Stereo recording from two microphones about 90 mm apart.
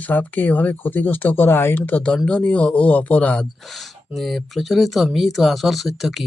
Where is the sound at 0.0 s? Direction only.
20° left (ahead or behind).